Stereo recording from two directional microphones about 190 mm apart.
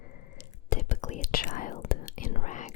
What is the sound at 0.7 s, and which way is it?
Whispering, 40° left (ahead or behind).